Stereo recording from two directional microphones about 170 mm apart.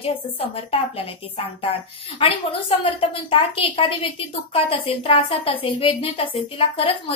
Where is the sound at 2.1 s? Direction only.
30° left (ahead or behind).